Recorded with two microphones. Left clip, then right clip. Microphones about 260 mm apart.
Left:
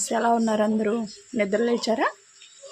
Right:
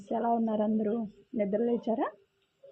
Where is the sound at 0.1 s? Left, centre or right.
Centre.